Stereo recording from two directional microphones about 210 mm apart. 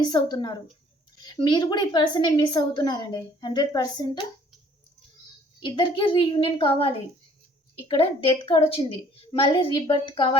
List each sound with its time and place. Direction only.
0.0 s a woman's voice: 20° left (ahead or behind)
5.6 s a woman's voice: 25° left (ahead or behind)